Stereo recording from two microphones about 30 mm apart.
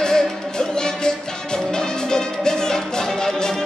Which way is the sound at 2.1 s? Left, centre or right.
Left.